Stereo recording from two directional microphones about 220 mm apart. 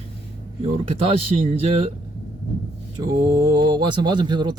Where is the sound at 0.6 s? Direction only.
25° right (ahead or behind).